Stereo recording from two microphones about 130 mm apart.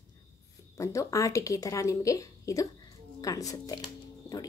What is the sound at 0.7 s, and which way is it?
A woman's voice, 25° left (ahead or behind).